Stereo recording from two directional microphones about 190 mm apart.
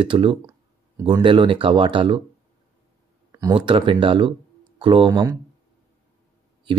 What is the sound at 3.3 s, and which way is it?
Speech, 20° right (ahead or behind).